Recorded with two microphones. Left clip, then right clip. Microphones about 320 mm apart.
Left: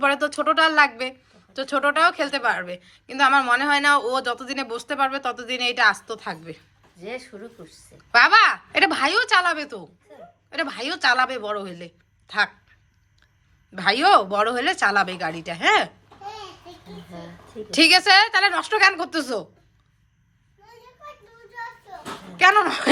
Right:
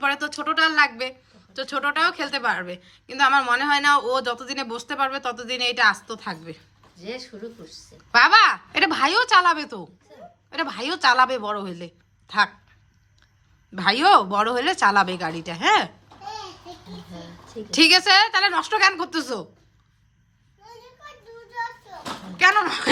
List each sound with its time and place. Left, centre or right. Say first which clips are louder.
0.0 s a woman's voice: left 3 dB; centre
7.0 s speech: even; centre
8.1 s speech: even; centre
13.7 s speech: even; centre
17.7 s speech: left 1 dB; centre
22.4 s speech: left 2 dB; centre